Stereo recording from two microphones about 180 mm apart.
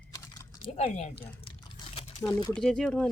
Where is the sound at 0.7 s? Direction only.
40° left (ahead or behind).